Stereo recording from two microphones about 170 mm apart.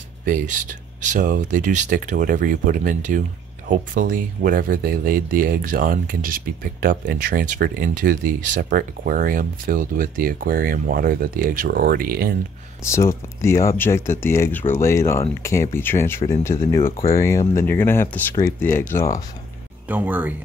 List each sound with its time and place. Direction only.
0.2 s speech: 50° right (ahead or behind)
12.9 s speech: 15° left (ahead or behind)
19.9 s speech: 10° right (ahead or behind)